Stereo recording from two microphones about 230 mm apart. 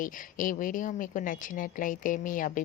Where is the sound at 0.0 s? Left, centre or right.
Left.